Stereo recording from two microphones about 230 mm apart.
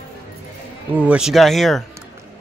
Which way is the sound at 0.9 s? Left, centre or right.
Centre.